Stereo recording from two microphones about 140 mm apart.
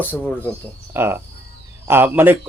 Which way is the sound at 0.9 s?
15° right (ahead or behind).